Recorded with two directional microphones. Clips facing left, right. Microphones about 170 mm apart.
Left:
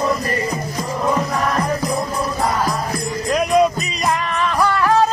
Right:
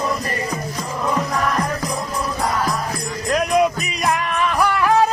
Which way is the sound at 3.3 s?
Centre (ahead or behind).